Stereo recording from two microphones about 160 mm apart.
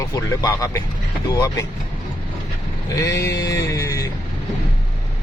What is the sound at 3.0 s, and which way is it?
Speech, 20° left (ahead or behind).